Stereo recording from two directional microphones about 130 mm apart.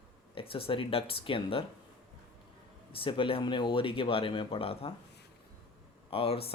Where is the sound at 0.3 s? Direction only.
45° left (ahead or behind).